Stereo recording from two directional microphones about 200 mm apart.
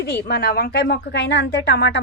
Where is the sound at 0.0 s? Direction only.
55° left (ahead or behind).